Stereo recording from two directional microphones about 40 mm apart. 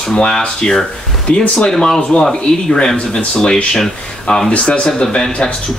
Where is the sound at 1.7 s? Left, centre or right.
Centre.